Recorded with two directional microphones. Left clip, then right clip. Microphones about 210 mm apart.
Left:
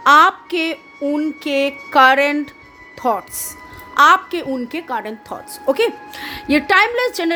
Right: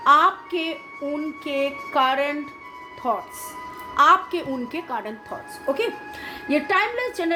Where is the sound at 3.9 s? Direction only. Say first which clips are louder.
Left 5 dB; 40° left (ahead or behind).